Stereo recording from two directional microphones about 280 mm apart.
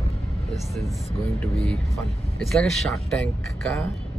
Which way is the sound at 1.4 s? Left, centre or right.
Centre.